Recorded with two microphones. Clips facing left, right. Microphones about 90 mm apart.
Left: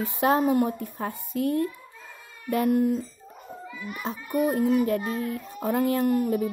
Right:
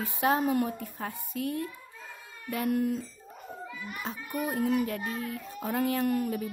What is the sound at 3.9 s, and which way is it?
Speech, 30° left (ahead or behind).